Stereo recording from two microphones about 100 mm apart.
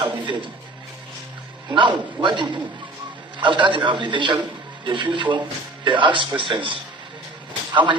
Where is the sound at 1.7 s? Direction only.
55° right (ahead or behind).